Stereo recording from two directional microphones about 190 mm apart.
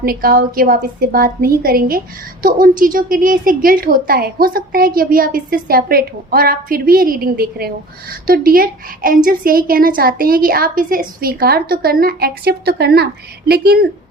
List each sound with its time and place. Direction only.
0.0 s a woman's voice: 50° right (ahead or behind)